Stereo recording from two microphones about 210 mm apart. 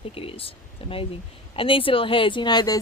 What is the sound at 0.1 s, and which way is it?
A woman's voice, 25° left (ahead or behind).